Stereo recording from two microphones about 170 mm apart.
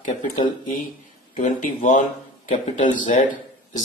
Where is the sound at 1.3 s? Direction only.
50° left (ahead or behind).